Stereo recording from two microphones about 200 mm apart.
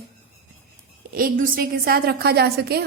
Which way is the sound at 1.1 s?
45° right (ahead or behind).